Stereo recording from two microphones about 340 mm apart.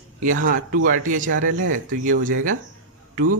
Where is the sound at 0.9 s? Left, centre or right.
Right.